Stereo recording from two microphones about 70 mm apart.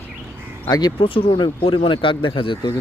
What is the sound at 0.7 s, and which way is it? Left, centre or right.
Speech, left.